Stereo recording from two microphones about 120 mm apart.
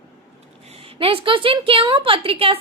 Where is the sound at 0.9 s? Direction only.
45° right (ahead or behind).